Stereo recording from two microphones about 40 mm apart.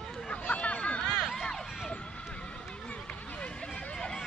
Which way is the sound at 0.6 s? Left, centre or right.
Left.